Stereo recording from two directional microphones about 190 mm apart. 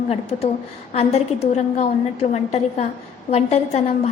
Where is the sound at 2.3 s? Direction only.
35° left (ahead or behind).